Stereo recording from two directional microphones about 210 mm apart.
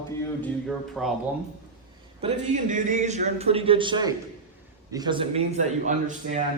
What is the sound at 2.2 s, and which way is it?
A man's voice, 35° right (ahead or behind).